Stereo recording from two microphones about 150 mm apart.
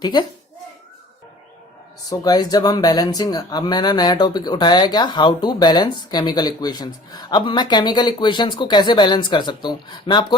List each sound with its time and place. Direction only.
0.0 s speech: 30° left (ahead or behind)
2.0 s speech: 25° left (ahead or behind)